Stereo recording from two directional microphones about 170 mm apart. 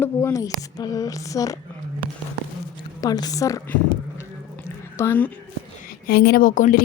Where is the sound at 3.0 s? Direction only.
25° left (ahead or behind).